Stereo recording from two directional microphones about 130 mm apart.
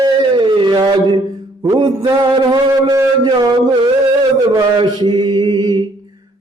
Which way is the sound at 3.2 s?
35° right (ahead or behind).